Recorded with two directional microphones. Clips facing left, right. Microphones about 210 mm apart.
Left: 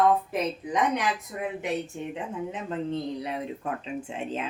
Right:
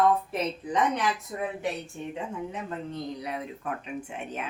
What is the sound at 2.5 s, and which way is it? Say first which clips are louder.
Speech: left 4 dB; 25° left (ahead or behind).